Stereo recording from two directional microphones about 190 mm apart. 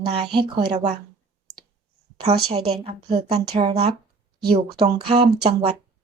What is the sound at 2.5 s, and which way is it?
A woman's voice, 30° right (ahead or behind).